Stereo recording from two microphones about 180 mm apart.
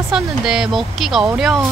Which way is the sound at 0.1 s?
5° right (ahead or behind).